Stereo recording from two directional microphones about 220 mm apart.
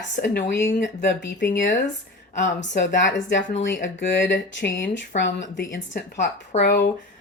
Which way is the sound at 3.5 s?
35° left (ahead or behind).